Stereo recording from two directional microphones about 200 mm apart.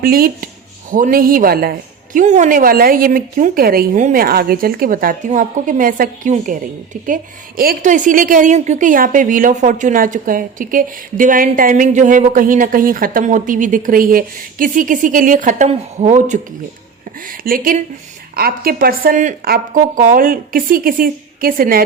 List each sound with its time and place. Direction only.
0.0 s speech: 45° right (ahead or behind)
2.1 s a woman's voice: 40° right (ahead or behind)